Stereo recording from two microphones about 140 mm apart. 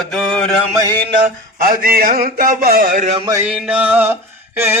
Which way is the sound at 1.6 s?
90° right.